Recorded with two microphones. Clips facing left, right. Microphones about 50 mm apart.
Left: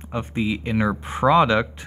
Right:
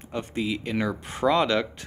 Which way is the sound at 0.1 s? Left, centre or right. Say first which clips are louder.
Left 4 dB; centre.